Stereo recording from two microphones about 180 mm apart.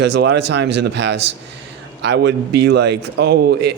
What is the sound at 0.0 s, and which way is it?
Speech, 70° right (ahead or behind).